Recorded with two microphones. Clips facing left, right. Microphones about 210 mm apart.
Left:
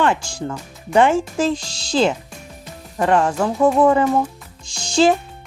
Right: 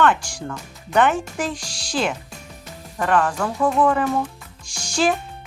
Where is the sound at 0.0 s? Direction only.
25° left (ahead or behind).